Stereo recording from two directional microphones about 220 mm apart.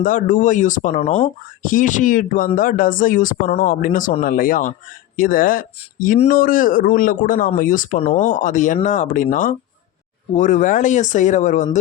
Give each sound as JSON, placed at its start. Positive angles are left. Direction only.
{"t": 0.0, "sound": "speech", "side_deg": 35}